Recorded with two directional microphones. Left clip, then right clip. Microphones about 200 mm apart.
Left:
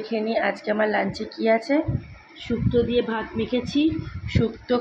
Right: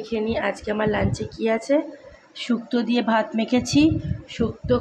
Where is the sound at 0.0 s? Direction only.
10° right (ahead or behind).